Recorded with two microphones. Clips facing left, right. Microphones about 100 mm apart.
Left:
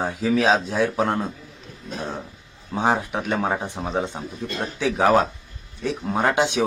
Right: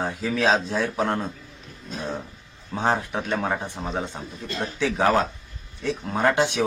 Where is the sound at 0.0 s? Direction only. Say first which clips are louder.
Left 3 dB; 10° left (ahead or behind).